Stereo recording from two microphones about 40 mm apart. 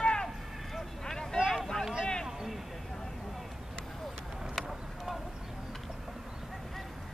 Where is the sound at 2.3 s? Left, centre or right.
Centre.